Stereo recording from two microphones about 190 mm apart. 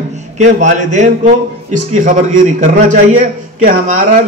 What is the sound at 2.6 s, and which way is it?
A man's voice, 40° right (ahead or behind).